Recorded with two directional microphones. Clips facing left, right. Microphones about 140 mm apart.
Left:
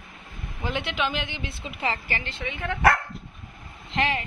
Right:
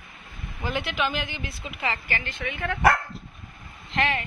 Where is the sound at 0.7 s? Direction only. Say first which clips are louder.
Right 1 dB; 20° left (ahead or behind).